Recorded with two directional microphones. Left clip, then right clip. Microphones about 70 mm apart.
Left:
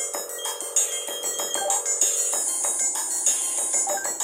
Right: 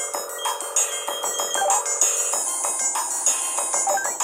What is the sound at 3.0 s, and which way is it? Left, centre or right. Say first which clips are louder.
Music: right 3 dB; left.